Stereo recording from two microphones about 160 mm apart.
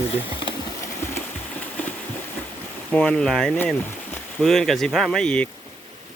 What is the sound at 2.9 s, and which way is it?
Speech, 5° left (ahead or behind).